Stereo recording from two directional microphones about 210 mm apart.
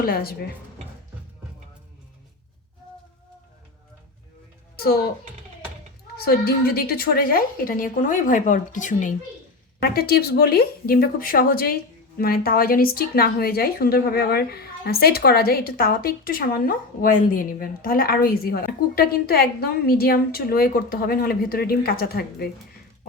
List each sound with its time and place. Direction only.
0.0 s speech: 45° left (ahead or behind)
6.1 s speech: 45° left (ahead or behind)